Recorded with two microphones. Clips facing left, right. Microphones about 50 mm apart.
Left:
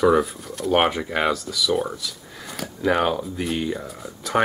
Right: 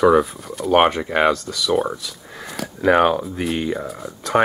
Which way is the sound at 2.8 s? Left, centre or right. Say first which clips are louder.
Right 5 dB; right.